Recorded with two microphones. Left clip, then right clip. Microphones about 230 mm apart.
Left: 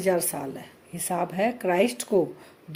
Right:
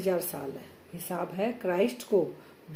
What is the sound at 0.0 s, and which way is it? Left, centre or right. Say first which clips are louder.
Speech: left 5 dB; left.